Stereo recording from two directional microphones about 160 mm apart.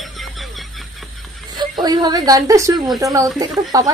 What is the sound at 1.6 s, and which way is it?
A woman's voice, 25° right (ahead or behind).